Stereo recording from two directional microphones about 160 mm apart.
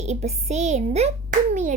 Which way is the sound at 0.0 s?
45° right (ahead or behind).